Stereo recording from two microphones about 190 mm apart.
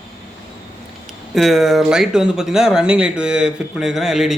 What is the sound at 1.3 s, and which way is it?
Speech, centre (ahead or behind).